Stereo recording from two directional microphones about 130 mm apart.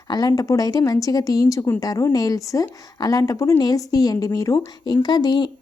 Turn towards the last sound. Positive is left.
turn(degrees=35)  # may be behind; listen again after turning